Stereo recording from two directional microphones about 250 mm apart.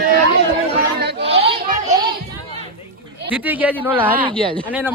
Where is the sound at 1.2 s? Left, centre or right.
Right.